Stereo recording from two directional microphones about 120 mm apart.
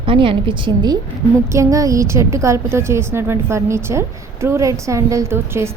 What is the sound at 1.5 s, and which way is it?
A woman's voice, 25° right (ahead or behind).